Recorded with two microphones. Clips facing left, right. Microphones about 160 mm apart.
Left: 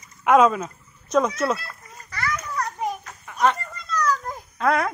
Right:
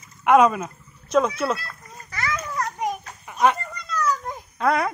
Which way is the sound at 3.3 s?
5° right (ahead or behind).